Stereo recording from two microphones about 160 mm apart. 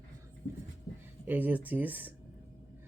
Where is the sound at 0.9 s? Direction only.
20° left (ahead or behind).